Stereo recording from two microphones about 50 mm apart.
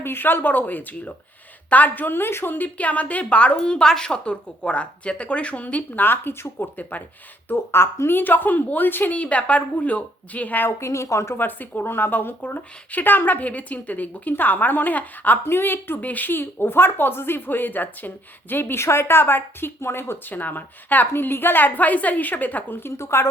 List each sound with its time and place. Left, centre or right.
0.0 s a woman's voice: left
2.7 s a woman's voice: left
5.9 s speech: left
6.6 s a woman's voice: left
7.4 s speech: left
8.2 s a woman's voice: left
9.1 s a woman's voice: left
10.8 s a woman's voice: left
11.3 s a woman's voice: left
15.4 s speech: left
20.3 s a woman's voice: left
22.8 s a woman's voice: left